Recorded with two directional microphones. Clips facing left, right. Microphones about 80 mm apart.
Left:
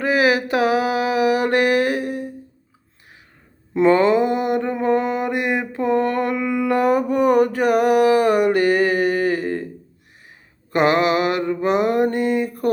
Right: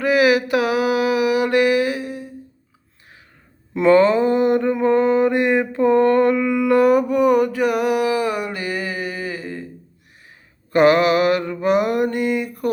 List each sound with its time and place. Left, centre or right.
0.0 s mantra: left
3.8 s mantra: centre
7.1 s mantra: left
10.7 s mantra: left
12.0 s a sound: left